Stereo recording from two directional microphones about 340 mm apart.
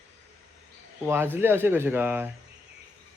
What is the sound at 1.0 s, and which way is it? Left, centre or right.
Speech, centre.